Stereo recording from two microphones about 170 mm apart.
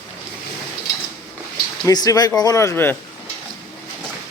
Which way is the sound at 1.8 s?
20° left (ahead or behind).